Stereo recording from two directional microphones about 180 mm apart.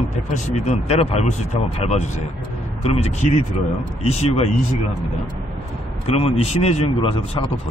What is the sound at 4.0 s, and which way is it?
Speech, 35° left (ahead or behind).